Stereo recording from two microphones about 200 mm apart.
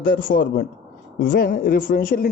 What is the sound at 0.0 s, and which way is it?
Speech, 45° left (ahead or behind).